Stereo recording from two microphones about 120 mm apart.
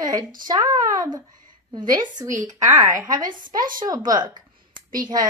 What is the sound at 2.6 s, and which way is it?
A woman's voice, 30° right (ahead or behind).